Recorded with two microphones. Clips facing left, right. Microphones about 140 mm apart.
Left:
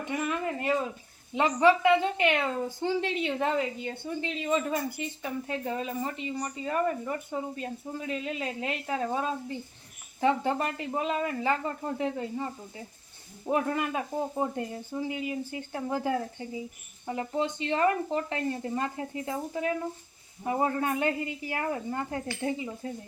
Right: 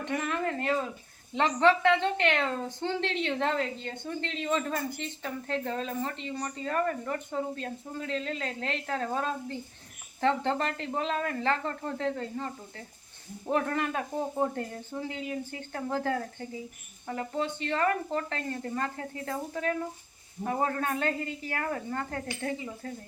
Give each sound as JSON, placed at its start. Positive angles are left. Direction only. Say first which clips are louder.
{"t": 0.0, "sound": "a woman's voice", "louder": "even", "side_deg": 10}